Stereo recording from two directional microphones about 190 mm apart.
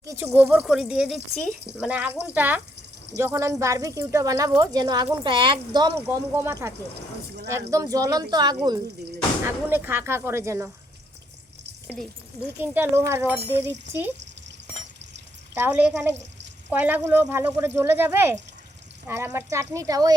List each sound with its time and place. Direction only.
0.0 s a woman's voice: 15° right (ahead or behind)
11.9 s speech: 10° left (ahead or behind)
12.5 s speech: 10° right (ahead or behind)
15.5 s speech: 10° right (ahead or behind)